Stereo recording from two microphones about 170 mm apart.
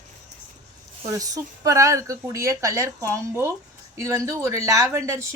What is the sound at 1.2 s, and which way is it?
Speech, 20° right (ahead or behind).